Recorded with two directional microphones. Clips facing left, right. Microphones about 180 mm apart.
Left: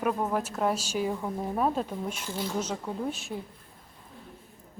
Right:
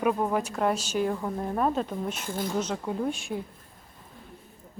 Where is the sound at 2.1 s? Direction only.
50° right (ahead or behind).